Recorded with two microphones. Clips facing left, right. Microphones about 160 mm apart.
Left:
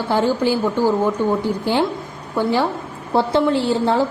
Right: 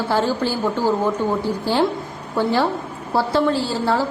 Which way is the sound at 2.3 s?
15° left (ahead or behind).